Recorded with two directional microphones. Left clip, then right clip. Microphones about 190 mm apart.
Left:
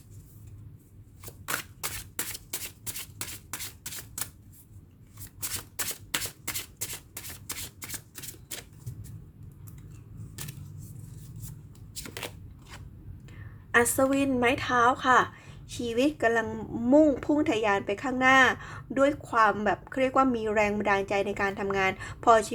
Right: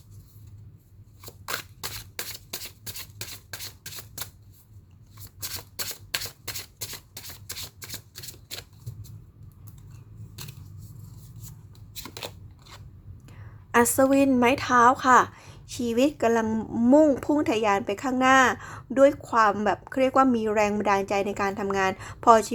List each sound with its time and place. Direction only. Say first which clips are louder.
1.2 s a sound: right 1 dB; centre (ahead or behind)
2.3 s shuffling cards: right 1 dB; centre (ahead or behind)
5.4 s shuffling cards: right 1 dB; 10° left (ahead or behind)
7.8 s typewriter: right 1 dB; centre (ahead or behind)
12.1 s scissors: left 1 dB; centre (ahead or behind)
13.2 s a sound: right 1 dB; 20° right (ahead or behind)
14.3 s a woman's voice: right 4 dB; 20° right (ahead or behind)